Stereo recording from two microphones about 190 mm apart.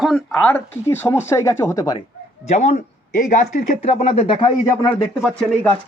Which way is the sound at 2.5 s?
35° left (ahead or behind).